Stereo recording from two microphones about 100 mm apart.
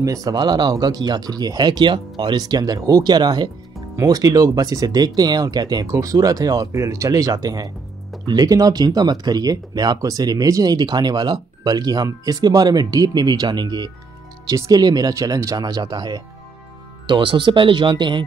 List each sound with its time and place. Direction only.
0.0 s speech: 35° right (ahead or behind)
17.0 s speech: 55° right (ahead or behind)